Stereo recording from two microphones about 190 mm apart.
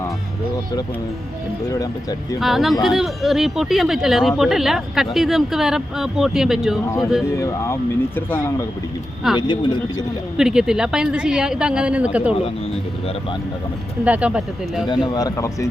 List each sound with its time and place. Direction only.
1.8 s speech: 20° left (ahead or behind)
2.4 s speech: centre (ahead or behind)
6.8 s speech: 15° left (ahead or behind)
9.3 s speech: 25° left (ahead or behind)
10.3 s speech: 5° right (ahead or behind)
14.0 s speech: 5° right (ahead or behind)
15.0 s speech: 20° left (ahead or behind)